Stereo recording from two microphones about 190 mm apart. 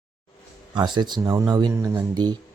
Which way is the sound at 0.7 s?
25° right (ahead or behind).